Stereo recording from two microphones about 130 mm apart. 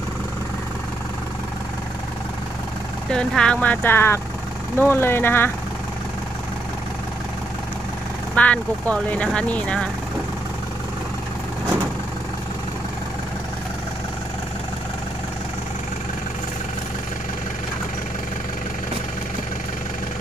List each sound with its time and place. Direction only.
3.1 s speech: 5° left (ahead or behind)
8.4 s speech: 10° left (ahead or behind)